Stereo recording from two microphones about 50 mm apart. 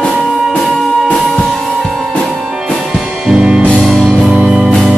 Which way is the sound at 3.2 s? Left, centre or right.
Centre.